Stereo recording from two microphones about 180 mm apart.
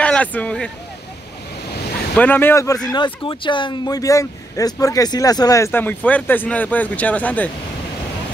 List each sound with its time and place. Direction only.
0.0 s speech: 5° left (ahead or behind)
2.1 s speech: 10° left (ahead or behind)
2.9 s speech: 25° left (ahead or behind); by 7.5 s 10° left (ahead or behind)